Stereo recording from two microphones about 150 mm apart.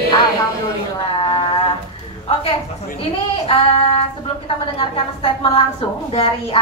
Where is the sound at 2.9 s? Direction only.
40° left (ahead or behind).